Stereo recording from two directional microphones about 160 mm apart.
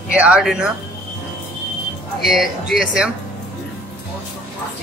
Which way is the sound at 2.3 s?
Centre (ahead or behind).